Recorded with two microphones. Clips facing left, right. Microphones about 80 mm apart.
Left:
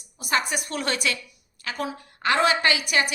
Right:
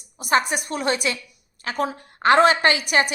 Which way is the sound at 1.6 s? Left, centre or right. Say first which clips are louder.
Right 5 dB; right.